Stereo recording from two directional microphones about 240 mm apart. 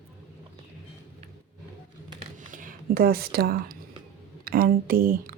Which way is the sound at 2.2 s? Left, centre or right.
Right.